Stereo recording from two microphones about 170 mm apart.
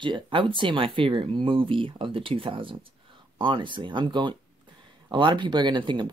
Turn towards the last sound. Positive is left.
turn(degrees=-30)  # may be behind; listen again after turning